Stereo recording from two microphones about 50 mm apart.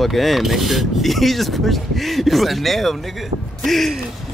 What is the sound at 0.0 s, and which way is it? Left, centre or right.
Speech, centre.